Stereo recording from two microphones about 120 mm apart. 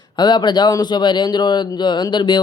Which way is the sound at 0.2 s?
35° left (ahead or behind).